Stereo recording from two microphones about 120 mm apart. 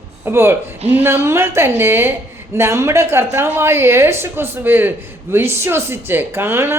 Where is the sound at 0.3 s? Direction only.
20° right (ahead or behind).